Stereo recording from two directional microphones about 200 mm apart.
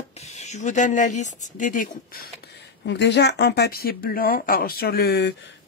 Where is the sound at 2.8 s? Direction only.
60° left (ahead or behind).